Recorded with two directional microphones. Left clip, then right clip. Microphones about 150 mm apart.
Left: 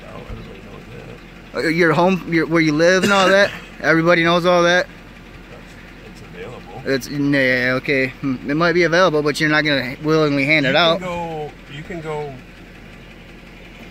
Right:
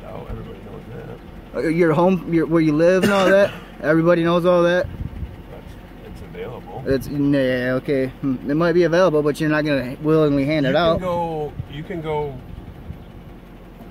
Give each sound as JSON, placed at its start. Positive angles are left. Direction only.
{"t": 1.5, "sound": "speech", "side_deg": 5}
{"t": 6.8, "sound": "speech", "side_deg": 5}
{"t": 11.1, "sound": "a sound", "side_deg": -35}